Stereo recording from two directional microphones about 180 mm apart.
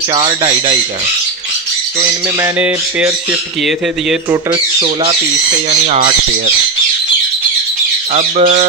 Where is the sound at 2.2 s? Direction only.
10° right (ahead or behind).